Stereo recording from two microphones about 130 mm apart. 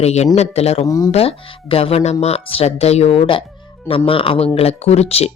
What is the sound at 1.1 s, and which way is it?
Speech, 50° left (ahead or behind).